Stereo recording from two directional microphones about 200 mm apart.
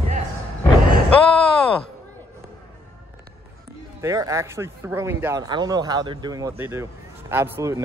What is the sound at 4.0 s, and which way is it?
Speech, 15° right (ahead or behind).